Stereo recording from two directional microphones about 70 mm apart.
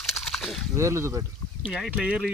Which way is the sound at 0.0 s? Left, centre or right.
Centre.